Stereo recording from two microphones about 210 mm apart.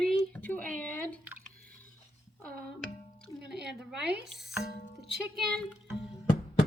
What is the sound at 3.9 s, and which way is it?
Speech, 55° right (ahead or behind).